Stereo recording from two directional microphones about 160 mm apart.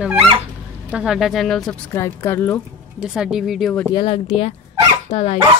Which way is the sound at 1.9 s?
15° left (ahead or behind).